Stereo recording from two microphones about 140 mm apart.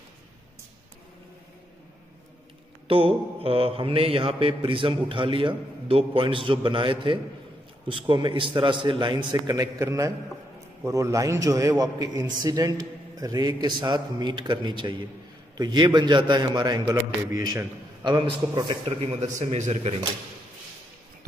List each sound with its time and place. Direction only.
2.9 s mantra: 40° right (ahead or behind); by 10.1 s 20° right (ahead or behind)
10.9 s a man's voice: 25° right (ahead or behind)
15.5 s mantra: 30° right (ahead or behind)
19.0 s a man's voice: 50° right (ahead or behind)